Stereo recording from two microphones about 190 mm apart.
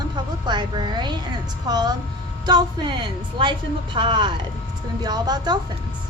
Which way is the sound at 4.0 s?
25° right (ahead or behind).